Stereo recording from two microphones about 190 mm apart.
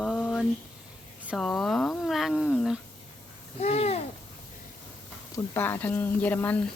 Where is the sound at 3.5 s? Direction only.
35° left (ahead or behind).